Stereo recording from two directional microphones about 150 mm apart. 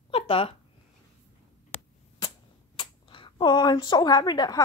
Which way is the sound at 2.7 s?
35° left (ahead or behind).